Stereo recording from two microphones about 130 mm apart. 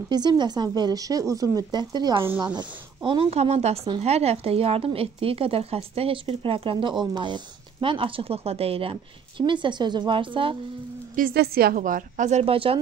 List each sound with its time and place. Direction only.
0.1 s a woman's voice: 35° right (ahead or behind)
9.5 s speech: 35° right (ahead or behind)
11.1 s a woman's voice: 90° right; by 12.5 s 60° right (ahead or behind)